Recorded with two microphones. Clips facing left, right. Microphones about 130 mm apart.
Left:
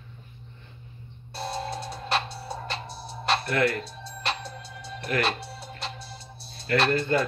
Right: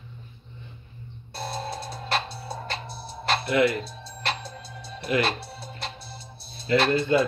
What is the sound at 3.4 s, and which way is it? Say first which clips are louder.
Speech: right 6 dB; 15° right (ahead or behind).